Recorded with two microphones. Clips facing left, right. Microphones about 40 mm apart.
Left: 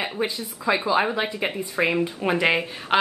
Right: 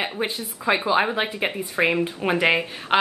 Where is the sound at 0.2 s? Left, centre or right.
Right; by 2.4 s centre.